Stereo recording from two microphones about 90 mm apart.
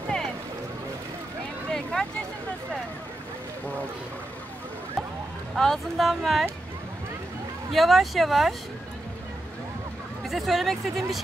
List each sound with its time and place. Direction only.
1.7 s a sound: 5° left (ahead or behind)
5.6 s speech: centre (ahead or behind)
7.7 s speech: centre (ahead or behind)
10.2 s speech: centre (ahead or behind)